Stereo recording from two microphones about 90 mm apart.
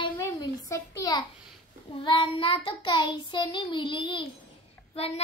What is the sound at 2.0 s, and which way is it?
Child singing, 75° left (ahead or behind).